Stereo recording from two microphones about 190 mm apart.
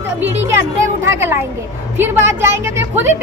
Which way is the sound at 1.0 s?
10° right (ahead or behind).